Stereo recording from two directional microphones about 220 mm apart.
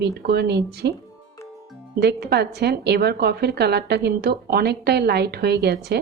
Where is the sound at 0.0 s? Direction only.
45° right (ahead or behind).